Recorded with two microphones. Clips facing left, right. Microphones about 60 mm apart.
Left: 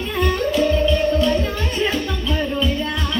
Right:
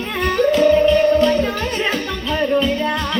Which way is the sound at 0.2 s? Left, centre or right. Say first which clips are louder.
Right 4 dB; right.